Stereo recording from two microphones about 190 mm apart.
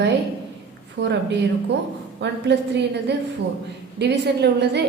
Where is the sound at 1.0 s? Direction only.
65° right (ahead or behind).